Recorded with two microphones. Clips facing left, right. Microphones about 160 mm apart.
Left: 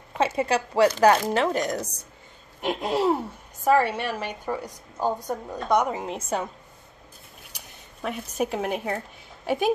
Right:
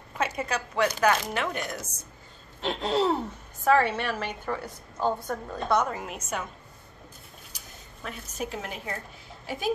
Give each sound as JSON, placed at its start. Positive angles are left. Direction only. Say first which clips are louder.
{"t": 0.2, "sound": "a woman's voice", "louder": "left 6 dB", "side_deg": 30}
{"t": 2.6, "sound": "a woman's voice", "louder": "left 2 dB", "side_deg": 10}
{"t": 7.5, "sound": "speech", "louder": "left 1 dB", "side_deg": 65}